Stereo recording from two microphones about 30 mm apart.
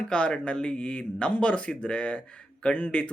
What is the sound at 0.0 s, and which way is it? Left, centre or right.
Speech, left.